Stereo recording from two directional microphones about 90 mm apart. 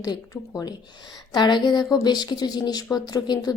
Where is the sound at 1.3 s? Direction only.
55° left (ahead or behind).